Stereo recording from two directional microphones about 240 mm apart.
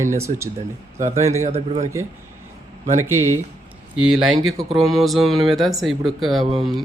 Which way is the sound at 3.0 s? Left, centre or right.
Centre.